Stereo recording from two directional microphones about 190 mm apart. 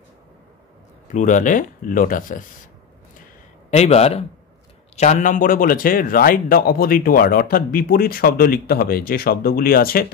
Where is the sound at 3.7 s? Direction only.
35° left (ahead or behind).